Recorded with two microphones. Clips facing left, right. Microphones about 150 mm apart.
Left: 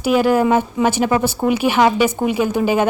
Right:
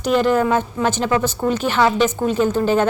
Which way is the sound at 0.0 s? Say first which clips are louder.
Left 2 dB; 10° left (ahead or behind).